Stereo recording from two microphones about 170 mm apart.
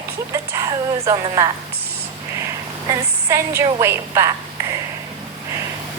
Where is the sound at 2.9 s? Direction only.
15° right (ahead or behind).